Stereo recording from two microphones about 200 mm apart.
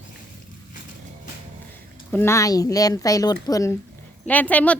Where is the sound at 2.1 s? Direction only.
15° left (ahead or behind).